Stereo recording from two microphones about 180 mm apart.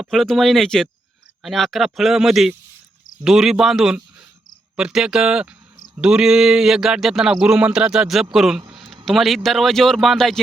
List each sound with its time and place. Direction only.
0.0 s speech: centre (ahead or behind)